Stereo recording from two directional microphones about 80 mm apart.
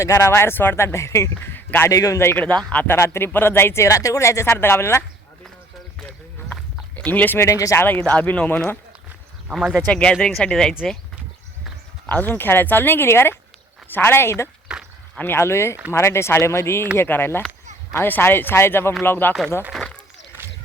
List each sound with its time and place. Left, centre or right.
0.2 s speech: left
1.4 s speech: left
1.9 s a man's voice: left
2.2 s speech: left
2.8 s speech: left
6.9 s speech: centre
7.3 s speech: left
7.8 s speech: left
9.5 s speech: centre
9.9 s speech: centre
12.0 s speech: left
19.7 s a sound: centre